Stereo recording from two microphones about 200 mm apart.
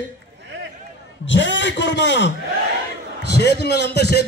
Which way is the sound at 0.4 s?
60° right (ahead or behind).